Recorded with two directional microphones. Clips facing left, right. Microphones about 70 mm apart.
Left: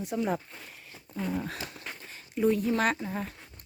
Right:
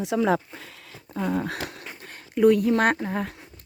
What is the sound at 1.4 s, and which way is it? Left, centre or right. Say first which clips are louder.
Speech: right 6 dB; right.